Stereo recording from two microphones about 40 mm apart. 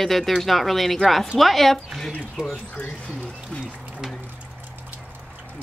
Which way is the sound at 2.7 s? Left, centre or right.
Left.